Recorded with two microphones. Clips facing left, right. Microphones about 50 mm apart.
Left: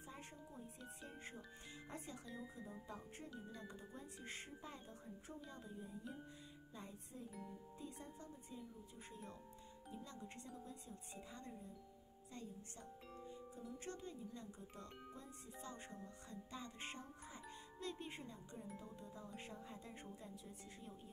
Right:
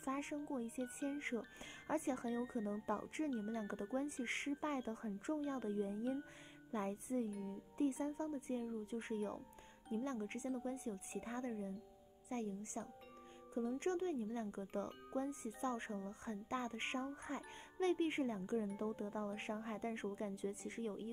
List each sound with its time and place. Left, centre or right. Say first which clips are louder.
0.0 s music: right 13 dB; right
1.9 s speech: right 14 dB; right
2.9 s speech: right 12 dB; right
8.9 s music: right 14 dB; right